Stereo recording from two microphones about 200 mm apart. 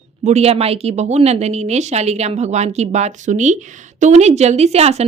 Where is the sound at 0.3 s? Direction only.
30° right (ahead or behind).